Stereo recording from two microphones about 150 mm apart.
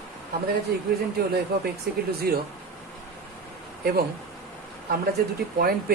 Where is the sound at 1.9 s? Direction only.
90° right.